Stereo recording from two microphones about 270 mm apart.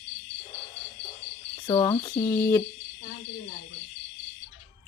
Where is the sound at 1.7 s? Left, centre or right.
Centre.